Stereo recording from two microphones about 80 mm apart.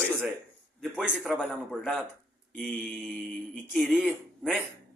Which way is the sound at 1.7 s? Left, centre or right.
Centre.